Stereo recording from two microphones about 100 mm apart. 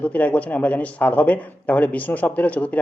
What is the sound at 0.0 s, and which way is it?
Speech, 15° left (ahead or behind).